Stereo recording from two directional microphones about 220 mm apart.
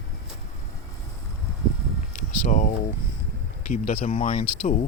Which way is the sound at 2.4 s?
35° left (ahead or behind).